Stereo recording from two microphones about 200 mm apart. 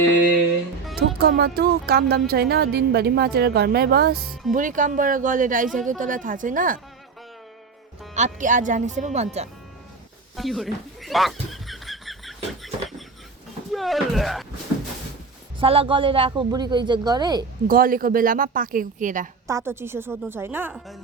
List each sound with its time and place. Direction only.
0.9 s speech: 50° right (ahead or behind)
8.1 s speech: 40° right (ahead or behind)
10.3 s a sound: centre (ahead or behind)
13.7 s speech: centre (ahead or behind)
15.6 s a woman's voice: 30° right (ahead or behind)
17.7 s speech: 45° right (ahead or behind)
19.5 s a woman's voice: 15° right (ahead or behind)